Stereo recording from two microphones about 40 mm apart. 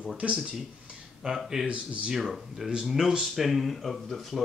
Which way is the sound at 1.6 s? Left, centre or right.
Right.